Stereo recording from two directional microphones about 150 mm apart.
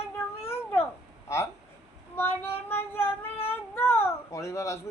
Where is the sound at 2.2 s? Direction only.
15° left (ahead or behind).